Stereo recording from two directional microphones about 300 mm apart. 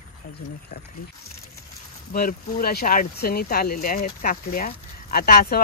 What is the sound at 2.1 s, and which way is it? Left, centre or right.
Speech, left.